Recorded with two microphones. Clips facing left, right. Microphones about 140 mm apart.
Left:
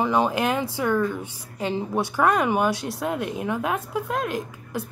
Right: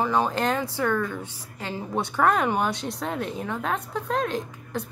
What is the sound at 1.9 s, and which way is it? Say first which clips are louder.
A woman's voice: even; 5° left (ahead or behind).